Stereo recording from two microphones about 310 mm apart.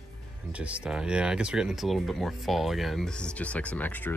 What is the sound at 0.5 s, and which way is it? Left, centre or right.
Speech, centre.